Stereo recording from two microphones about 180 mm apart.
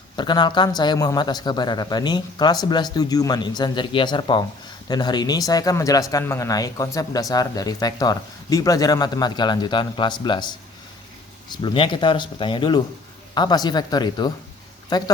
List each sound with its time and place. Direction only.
0.2 s a man's voice: 25° left (ahead or behind)